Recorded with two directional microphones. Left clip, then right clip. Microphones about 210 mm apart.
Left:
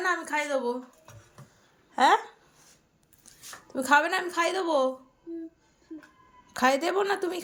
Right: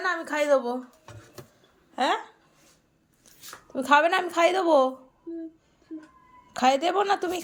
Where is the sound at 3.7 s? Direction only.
5° right (ahead or behind).